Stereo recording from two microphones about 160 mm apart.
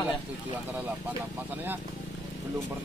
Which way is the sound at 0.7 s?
10° right (ahead or behind).